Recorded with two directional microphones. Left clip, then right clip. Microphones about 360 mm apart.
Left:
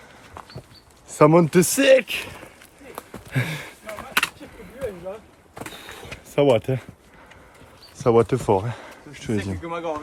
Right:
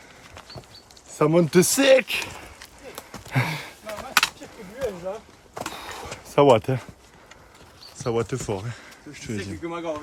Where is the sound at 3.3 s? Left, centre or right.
Centre.